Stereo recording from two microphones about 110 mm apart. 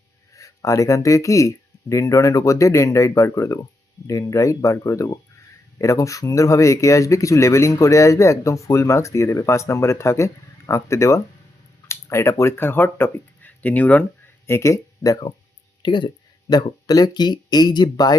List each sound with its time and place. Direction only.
0.3 s speech: 30° left (ahead or behind); by 14.0 s 15° left (ahead or behind)
14.4 s speech: 25° left (ahead or behind)
15.8 s speech: 45° left (ahead or behind)